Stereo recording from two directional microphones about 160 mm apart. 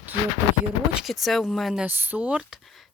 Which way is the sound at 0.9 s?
Centre (ahead or behind).